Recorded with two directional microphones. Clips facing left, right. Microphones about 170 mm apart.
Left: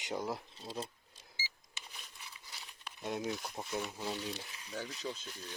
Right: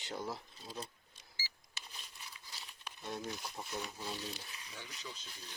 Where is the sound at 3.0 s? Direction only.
15° left (ahead or behind).